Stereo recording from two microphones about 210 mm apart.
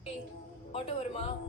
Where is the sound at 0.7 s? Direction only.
30° left (ahead or behind).